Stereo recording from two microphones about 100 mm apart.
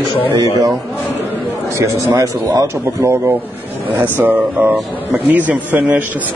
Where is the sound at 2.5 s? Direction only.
30° right (ahead or behind).